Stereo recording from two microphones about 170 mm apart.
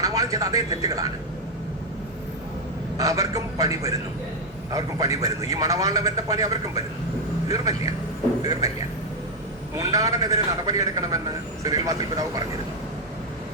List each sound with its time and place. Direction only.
0.0 s speech: 20° right (ahead or behind)
3.0 s a man's voice: 20° right (ahead or behind)
9.7 s a man's voice: 20° right (ahead or behind)